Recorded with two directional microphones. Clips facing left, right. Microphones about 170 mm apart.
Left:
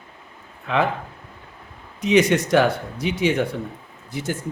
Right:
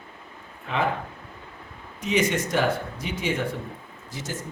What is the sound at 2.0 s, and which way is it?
Speech, 75° left (ahead or behind).